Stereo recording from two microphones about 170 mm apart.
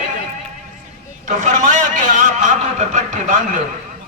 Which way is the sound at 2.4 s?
45° right (ahead or behind).